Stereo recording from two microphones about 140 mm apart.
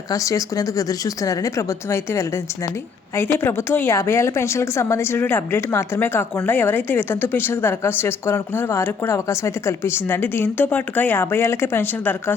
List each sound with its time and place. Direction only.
0.1 s a woman's voice: 25° left (ahead or behind)